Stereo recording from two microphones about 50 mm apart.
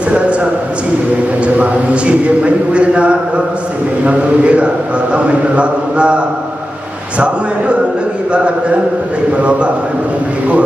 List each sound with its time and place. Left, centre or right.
0.1 s a sound: right
1.4 s a man's voice: right
8.3 s a man's voice: right